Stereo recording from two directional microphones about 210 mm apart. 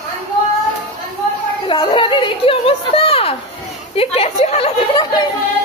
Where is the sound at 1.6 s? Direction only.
25° left (ahead or behind).